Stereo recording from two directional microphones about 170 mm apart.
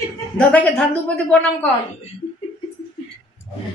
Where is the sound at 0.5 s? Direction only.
10° left (ahead or behind).